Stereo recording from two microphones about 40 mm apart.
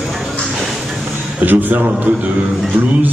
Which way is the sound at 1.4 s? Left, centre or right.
Right.